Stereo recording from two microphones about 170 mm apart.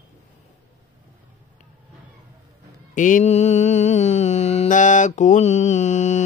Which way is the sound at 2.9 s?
50° left (ahead or behind).